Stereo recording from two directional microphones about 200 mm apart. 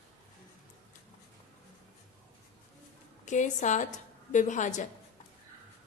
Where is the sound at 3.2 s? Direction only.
35° left (ahead or behind).